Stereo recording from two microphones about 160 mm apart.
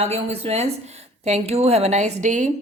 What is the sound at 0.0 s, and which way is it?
A woman's voice, 40° right (ahead or behind).